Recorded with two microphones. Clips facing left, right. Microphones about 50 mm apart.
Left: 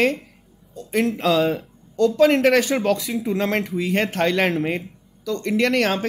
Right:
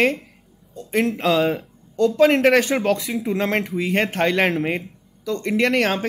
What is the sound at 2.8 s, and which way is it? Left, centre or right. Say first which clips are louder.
Speech: even; centre.